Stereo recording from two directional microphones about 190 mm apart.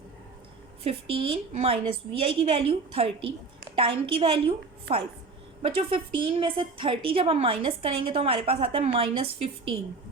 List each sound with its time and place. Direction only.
0.9 s a woman's voice: 30° right (ahead or behind)